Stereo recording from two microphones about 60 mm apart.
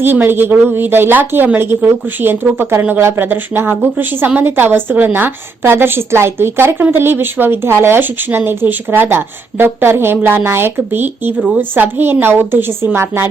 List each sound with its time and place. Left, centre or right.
0.0 s a woman's voice: right